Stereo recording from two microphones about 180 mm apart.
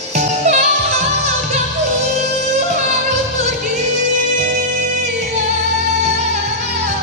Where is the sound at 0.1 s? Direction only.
40° right (ahead or behind).